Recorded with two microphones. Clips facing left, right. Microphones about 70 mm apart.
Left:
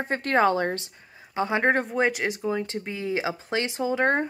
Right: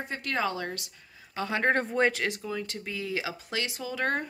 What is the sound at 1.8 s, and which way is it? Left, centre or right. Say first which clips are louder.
Speech: left 2 dB; centre.